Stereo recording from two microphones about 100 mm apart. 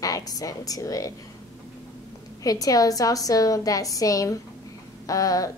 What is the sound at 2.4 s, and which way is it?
A woman's voice, 35° left (ahead or behind).